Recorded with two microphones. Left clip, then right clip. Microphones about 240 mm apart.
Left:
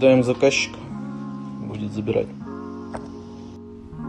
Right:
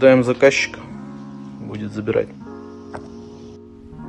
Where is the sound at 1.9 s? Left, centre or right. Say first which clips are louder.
Right 3 dB; right.